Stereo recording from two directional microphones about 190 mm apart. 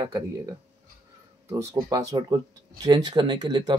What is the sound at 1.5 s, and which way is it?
Speech, 15° right (ahead or behind).